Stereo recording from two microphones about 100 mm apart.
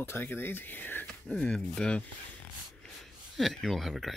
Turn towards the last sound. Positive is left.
turn(degrees=0)  # may be behind; listen again after turning